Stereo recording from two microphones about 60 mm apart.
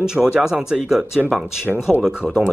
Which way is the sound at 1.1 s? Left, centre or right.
Centre.